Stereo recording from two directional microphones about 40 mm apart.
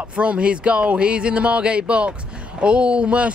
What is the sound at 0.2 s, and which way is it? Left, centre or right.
Speech, right.